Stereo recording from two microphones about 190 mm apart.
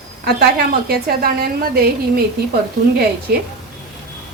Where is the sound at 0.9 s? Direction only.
55° right (ahead or behind).